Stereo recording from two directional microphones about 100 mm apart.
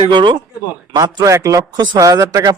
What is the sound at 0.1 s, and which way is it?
Speech, 55° right (ahead or behind).